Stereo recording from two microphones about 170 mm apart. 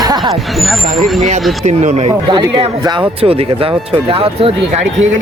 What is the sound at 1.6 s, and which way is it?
Speech, 45° right (ahead or behind).